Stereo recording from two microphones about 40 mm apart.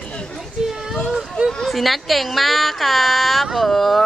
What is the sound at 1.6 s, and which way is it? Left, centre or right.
Speech, centre.